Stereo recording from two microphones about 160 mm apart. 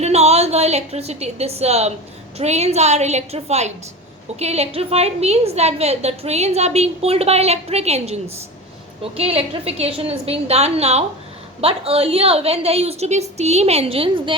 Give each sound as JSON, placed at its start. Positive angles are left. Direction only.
{"t": 0.0, "sound": "a woman's voice", "side_deg": -40}